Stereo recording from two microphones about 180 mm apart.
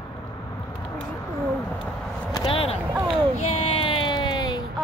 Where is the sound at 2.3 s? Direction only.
30° left (ahead or behind).